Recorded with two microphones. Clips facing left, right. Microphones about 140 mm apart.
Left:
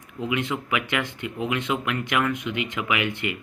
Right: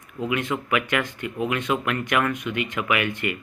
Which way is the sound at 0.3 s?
15° left (ahead or behind).